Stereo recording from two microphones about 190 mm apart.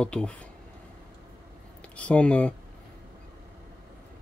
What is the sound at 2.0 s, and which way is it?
Speech, 5° left (ahead or behind).